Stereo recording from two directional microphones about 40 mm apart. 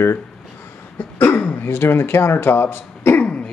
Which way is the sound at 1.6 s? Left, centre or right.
Left.